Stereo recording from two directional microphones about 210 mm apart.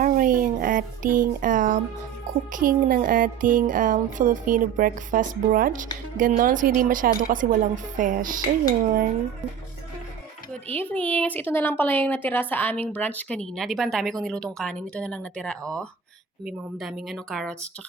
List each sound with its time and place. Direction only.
0.0 s a sound: 40° right (ahead or behind)
2.5 s music: 40° right (ahead or behind)
10.5 s speech: 10° left (ahead or behind)